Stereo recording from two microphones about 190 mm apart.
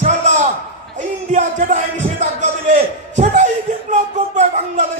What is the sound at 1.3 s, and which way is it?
A man's voice, 40° right (ahead or behind).